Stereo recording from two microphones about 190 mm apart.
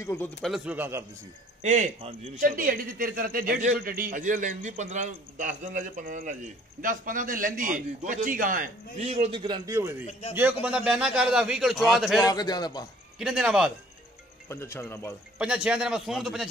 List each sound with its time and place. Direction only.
0.0 s speech: 15° left (ahead or behind)
0.4 s a man's voice: 5° right (ahead or behind)
1.6 s speech: 35° right (ahead or behind)
8.9 s a man's voice: 35° right (ahead or behind); by 12.3 s centre (ahead or behind)
12.3 s a man's voice: 20° left (ahead or behind)
13.2 s a man's voice: 5° right (ahead or behind)
14.5 s speech: 15° left (ahead or behind)
15.3 s a man's voice: 5° right (ahead or behind)